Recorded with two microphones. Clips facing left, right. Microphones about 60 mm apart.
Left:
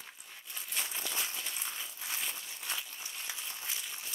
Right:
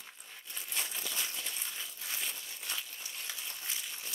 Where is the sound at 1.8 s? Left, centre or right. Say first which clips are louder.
Left 1 dB; centre.